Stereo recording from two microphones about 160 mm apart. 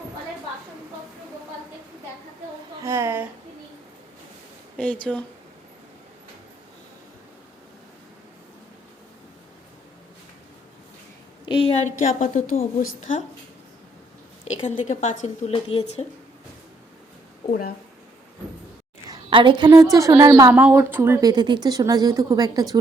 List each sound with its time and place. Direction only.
2.8 s speech: 15° right (ahead or behind)
5.1 s speech: 5° left (ahead or behind)
11.4 s a sound: 30° left (ahead or behind)
11.9 s a woman's voice: 50° left (ahead or behind)
14.5 s a woman's voice: 50° left (ahead or behind)
15.5 s speech: 40° left (ahead or behind)
17.5 s speech: 65° left (ahead or behind)
19.1 s a woman's voice: 30° right (ahead or behind)
20.5 s a woman's voice: 10° right (ahead or behind)